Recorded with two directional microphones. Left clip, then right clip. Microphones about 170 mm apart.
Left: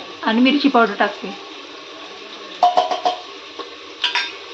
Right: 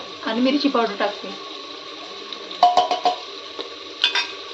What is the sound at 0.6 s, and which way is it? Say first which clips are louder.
Speech: left 5 dB; 50° left (ahead or behind).